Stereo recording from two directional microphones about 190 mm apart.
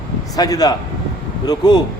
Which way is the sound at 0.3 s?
20° left (ahead or behind).